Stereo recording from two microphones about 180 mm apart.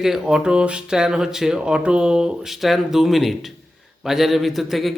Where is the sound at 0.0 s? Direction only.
5° right (ahead or behind).